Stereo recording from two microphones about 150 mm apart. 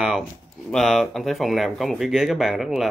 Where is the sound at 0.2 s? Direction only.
Centre (ahead or behind).